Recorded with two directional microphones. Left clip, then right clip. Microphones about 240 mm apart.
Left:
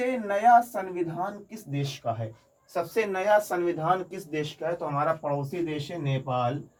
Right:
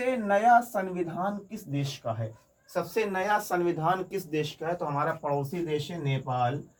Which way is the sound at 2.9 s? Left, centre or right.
Centre.